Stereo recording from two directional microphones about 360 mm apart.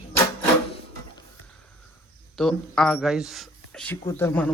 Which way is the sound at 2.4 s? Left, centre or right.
Centre.